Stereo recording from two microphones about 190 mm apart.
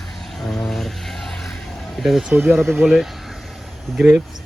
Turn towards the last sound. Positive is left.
turn(degrees=0)  # may be behind; listen again after turning